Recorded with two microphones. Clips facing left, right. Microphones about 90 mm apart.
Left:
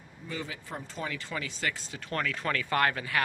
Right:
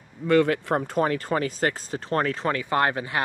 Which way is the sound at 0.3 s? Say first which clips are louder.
Right 18 dB; 65° right (ahead or behind).